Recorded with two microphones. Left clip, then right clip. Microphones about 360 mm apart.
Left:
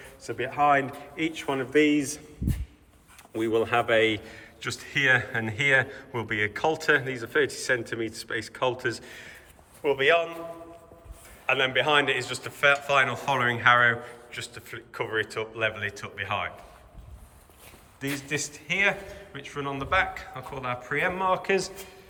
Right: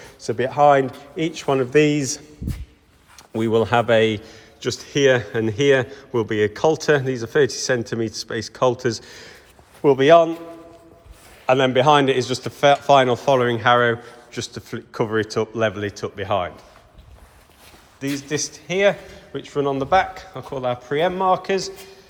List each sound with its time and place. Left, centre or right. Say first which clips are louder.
0.2 s a man's voice: right 8 dB; centre
3.7 s a man's voice: right 5 dB; centre
11.4 s a man's voice: right 8 dB; centre
18.0 s a man's voice: right 6 dB; centre